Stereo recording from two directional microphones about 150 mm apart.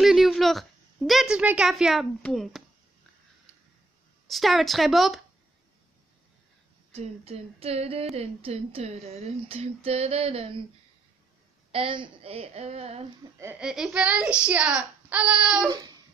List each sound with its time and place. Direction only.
0.0 s a sound: centre (ahead or behind)
2.2 s speech: centre (ahead or behind)
4.3 s speech: centre (ahead or behind)
6.9 s a sound: 40° right (ahead or behind)
11.7 s a woman's voice: 35° right (ahead or behind)
13.6 s a child's voice: 5° right (ahead or behind)